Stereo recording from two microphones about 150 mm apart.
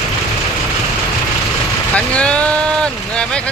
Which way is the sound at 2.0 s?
10° left (ahead or behind).